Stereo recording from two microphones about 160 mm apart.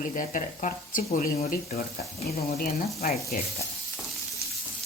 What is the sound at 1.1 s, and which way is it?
Speech, 45° left (ahead or behind).